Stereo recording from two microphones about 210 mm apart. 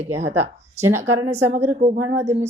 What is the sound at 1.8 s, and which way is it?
Speech, 35° right (ahead or behind).